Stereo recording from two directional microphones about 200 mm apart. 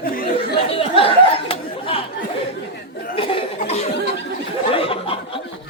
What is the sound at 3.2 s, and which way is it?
Laughter, 25° left (ahead or behind).